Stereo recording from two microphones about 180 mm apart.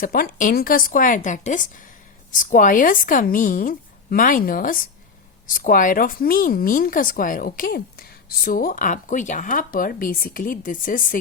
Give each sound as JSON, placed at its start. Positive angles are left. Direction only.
{"t": 0.0, "sound": "speech", "side_deg": 55}